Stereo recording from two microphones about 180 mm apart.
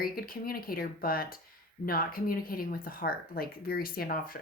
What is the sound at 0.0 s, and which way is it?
A woman's voice, 55° left (ahead or behind).